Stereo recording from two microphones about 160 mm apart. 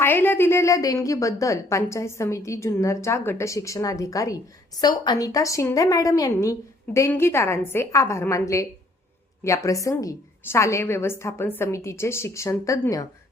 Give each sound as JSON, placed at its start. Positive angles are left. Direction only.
{"t": 0.0, "sound": "a woman's voice", "side_deg": 15}